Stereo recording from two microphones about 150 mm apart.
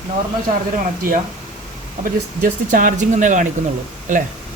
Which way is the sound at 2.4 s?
65° right (ahead or behind).